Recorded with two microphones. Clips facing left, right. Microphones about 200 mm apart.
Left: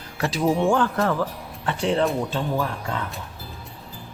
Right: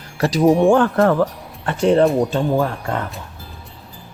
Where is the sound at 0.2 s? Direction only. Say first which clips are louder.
Right 7 dB; 40° right (ahead or behind).